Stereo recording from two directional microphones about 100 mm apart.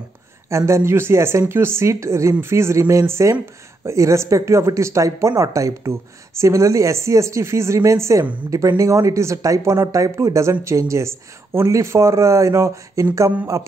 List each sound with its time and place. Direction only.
0.5 s speech: 30° right (ahead or behind)